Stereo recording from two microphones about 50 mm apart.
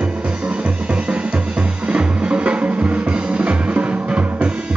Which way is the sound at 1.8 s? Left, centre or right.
Right.